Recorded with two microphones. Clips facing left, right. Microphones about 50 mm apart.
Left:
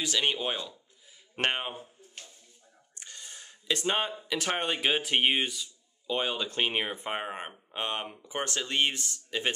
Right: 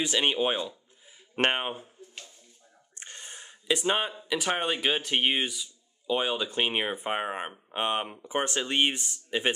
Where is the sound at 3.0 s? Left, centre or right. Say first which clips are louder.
Right 3 dB; right.